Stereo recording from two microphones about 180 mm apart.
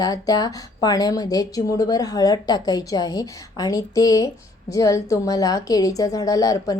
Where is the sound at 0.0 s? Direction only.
20° left (ahead or behind).